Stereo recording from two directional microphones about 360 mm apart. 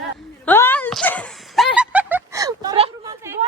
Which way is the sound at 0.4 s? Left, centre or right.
Centre.